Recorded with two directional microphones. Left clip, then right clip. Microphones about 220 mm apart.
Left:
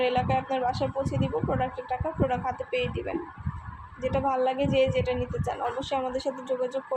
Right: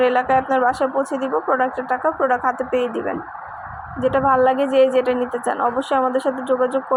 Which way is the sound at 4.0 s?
25° right (ahead or behind).